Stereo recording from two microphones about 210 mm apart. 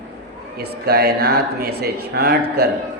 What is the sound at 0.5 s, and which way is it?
Speech, 50° right (ahead or behind).